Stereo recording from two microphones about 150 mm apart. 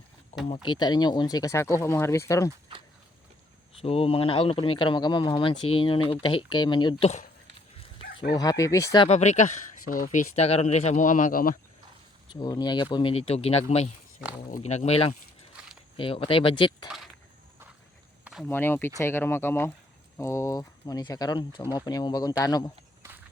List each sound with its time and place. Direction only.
0.4 s speech: 35° left (ahead or behind); by 2.5 s 20° left (ahead or behind)
3.8 s speech: 40° left (ahead or behind); by 9.0 s 20° left (ahead or behind)
9.0 s speech: 50° left (ahead or behind); by 11.5 s 70° left (ahead or behind)
12.3 s speech: 30° left (ahead or behind)
18.4 s speech: 15° left (ahead or behind)
23.0 s walk: 20° right (ahead or behind)